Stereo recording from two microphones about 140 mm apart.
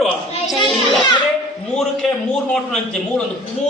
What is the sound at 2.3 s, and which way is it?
Speech, 5° left (ahead or behind).